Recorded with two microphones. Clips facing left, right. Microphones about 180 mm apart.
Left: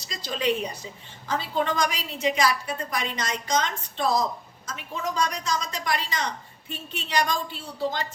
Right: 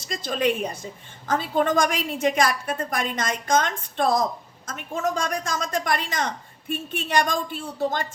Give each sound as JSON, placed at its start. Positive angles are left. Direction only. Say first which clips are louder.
{"t": 0.0, "sound": "a woman's voice", "louder": "right 4 dB", "side_deg": -50}